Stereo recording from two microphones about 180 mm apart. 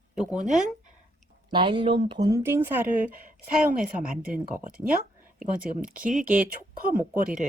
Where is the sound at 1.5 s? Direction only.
25° right (ahead or behind); by 7.2 s 10° right (ahead or behind).